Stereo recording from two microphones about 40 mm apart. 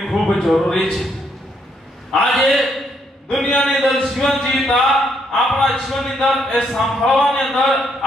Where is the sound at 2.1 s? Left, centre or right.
Centre.